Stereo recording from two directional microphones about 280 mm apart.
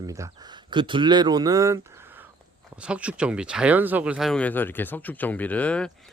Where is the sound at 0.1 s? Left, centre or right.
Centre.